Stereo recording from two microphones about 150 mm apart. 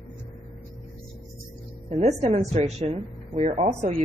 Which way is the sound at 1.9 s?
45° right (ahead or behind).